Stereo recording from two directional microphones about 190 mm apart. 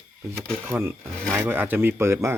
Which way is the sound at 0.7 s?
15° right (ahead or behind).